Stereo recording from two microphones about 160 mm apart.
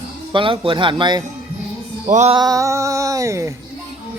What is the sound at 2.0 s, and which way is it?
Music, 50° right (ahead or behind).